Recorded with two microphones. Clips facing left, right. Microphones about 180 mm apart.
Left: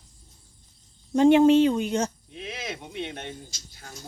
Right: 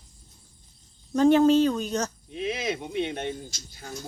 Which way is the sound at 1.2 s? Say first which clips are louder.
Left 2 dB; 20° left (ahead or behind).